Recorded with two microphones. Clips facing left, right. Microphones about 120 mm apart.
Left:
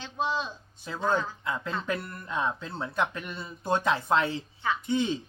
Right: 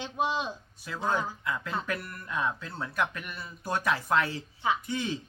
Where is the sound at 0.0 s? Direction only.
15° right (ahead or behind).